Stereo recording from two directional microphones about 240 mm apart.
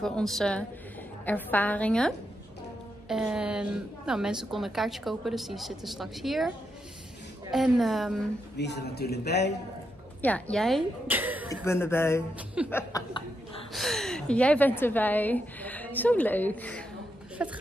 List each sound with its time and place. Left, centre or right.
0.0 s a woman's voice: centre
7.5 s a woman's voice: centre
8.5 s speech: left
10.2 s a woman's voice: centre
11.6 s a woman's voice: centre
17.4 s a woman's voice: centre